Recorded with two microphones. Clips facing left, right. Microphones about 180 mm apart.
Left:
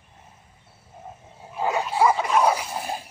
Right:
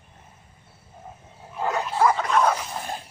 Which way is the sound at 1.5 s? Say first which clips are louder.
Left 1 dB; 5° left (ahead or behind).